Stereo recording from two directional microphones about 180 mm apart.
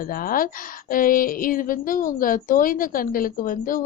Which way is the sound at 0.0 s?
50° left (ahead or behind).